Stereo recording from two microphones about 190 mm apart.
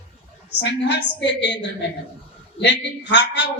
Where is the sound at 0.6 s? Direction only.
65° left (ahead or behind).